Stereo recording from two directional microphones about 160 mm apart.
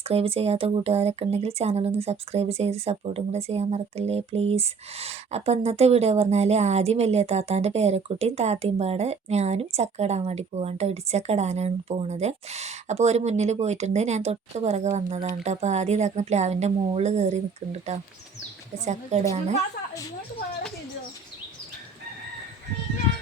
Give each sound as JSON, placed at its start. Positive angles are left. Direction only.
{"t": 0.0, "sound": "a woman's voice", "side_deg": -40}